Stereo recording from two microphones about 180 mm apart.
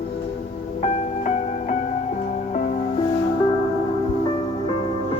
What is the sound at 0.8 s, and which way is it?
Music, 40° left (ahead or behind).